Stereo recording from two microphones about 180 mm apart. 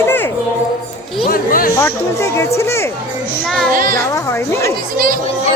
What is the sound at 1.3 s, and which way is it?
Speech, 55° left (ahead or behind).